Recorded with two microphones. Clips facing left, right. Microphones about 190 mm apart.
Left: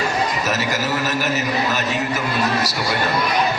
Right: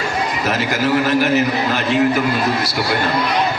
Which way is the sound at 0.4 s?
55° right (ahead or behind).